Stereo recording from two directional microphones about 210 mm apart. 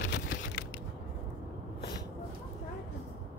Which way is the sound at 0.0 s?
60° left (ahead or behind).